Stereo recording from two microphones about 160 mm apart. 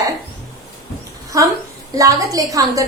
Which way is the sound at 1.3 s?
20° right (ahead or behind).